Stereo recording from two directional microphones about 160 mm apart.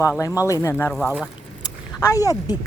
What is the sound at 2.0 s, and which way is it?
Speech, 20° left (ahead or behind).